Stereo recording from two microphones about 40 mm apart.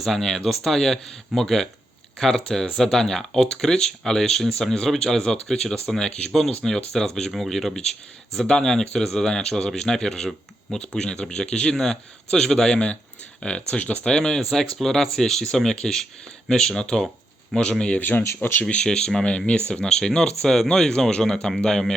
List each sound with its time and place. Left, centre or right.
0.2 s speech: centre
8.4 s a man's voice: centre
13.7 s speech: left
14.0 s a man's voice: centre
18.4 s speech: left
18.9 s a man's voice: centre